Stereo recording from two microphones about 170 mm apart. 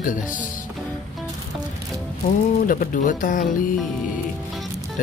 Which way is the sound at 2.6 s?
55° left (ahead or behind).